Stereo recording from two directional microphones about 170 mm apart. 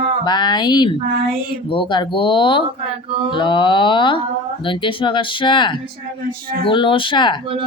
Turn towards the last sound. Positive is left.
turn(degrees=25)  # may be behind; listen again after turning